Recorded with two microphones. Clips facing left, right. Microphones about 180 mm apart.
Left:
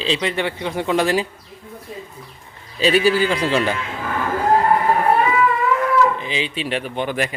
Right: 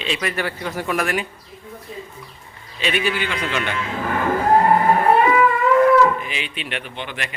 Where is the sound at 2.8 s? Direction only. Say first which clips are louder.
Left 7 dB; 35° left (ahead or behind).